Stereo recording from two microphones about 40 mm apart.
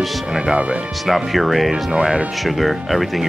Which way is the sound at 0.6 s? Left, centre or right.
Right.